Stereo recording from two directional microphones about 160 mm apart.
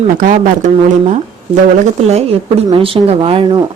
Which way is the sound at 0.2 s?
55° right (ahead or behind).